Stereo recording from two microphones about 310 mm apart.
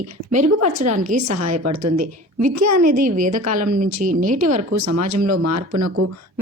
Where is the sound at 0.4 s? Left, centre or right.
Right.